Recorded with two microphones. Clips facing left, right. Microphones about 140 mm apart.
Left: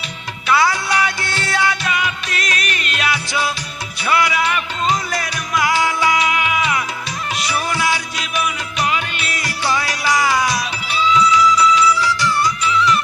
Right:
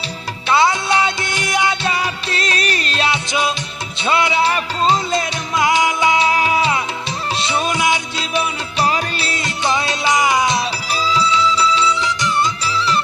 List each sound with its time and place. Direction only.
0.4 s music: 25° right (ahead or behind)
1.9 s music: 35° right (ahead or behind)
8.4 s music: 35° right (ahead or behind)
10.9 s music: 35° right (ahead or behind)
12.6 s music: 30° right (ahead or behind)